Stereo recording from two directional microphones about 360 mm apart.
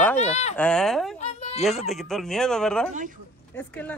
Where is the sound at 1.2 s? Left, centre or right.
Centre.